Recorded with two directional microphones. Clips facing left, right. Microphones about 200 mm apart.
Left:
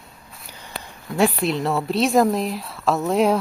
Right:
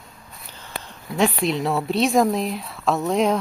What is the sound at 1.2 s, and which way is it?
A woman's voice, 5° left (ahead or behind).